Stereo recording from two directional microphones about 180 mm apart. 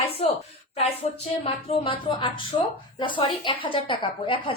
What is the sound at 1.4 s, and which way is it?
A woman's voice, 30° left (ahead or behind).